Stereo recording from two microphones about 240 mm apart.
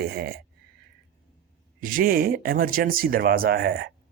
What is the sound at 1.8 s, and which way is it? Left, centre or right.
Speech, right.